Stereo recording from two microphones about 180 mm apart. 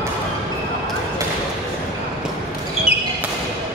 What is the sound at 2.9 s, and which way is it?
Basketball bounce, 5° right (ahead or behind).